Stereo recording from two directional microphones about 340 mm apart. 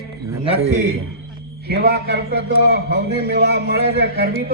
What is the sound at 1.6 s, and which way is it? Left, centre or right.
Speech, right.